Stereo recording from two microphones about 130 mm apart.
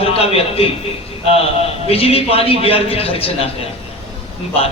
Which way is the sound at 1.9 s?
50° left (ahead or behind).